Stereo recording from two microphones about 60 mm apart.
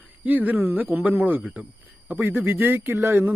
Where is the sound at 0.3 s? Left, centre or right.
Right.